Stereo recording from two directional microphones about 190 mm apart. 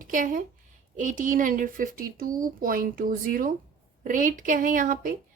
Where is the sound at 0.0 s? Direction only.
45° right (ahead or behind).